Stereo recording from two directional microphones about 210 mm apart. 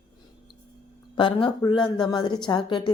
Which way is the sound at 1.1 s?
20° left (ahead or behind).